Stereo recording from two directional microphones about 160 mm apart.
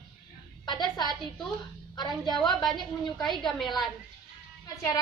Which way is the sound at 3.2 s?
Centre (ahead or behind).